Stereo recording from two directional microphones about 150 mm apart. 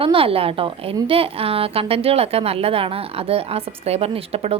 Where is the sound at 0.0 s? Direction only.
35° right (ahead or behind).